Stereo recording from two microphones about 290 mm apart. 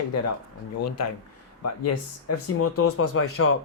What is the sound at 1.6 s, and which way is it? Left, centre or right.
Speech, left.